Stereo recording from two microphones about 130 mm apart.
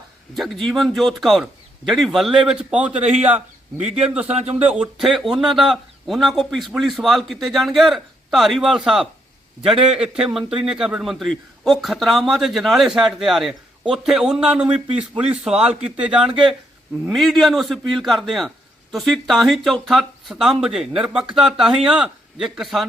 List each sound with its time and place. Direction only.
0.3 s a man's voice: centre (ahead or behind)
3.8 s a man's voice: 60° right (ahead or behind)
4.7 s a man's voice: 5° right (ahead or behind)